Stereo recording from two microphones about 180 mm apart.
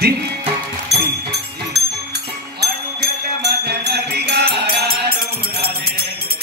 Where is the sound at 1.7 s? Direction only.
65° right (ahead or behind).